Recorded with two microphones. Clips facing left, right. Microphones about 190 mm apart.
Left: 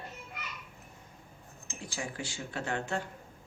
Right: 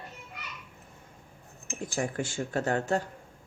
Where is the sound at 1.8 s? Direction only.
50° right (ahead or behind).